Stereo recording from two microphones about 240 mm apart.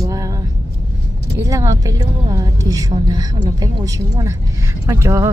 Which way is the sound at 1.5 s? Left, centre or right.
Centre.